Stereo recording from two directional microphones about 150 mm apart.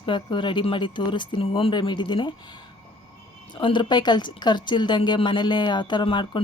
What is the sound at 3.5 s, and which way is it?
Speech, 30° left (ahead or behind).